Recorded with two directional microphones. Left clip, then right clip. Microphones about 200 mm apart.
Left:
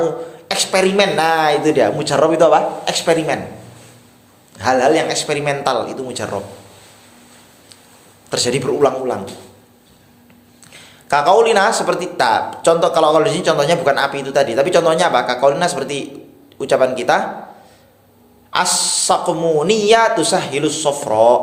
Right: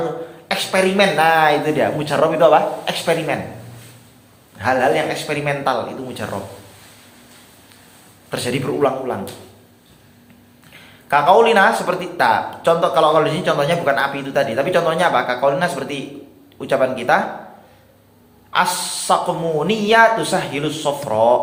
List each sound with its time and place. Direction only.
0.4 s speech: 45° left (ahead or behind)
4.5 s speech: 50° left (ahead or behind)
8.3 s speech: 50° left (ahead or behind)
10.7 s speech: 50° left (ahead or behind)
18.5 s speech: 50° left (ahead or behind)